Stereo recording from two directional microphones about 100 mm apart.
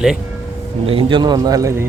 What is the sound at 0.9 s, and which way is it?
Speech, 60° right (ahead or behind).